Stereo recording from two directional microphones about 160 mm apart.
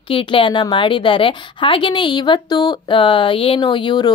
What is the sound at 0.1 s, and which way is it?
A woman's voice, 30° left (ahead or behind).